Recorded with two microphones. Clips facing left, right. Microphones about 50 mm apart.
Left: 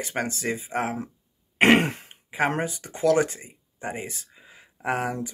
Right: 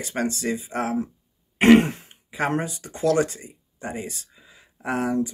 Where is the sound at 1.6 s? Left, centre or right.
Left.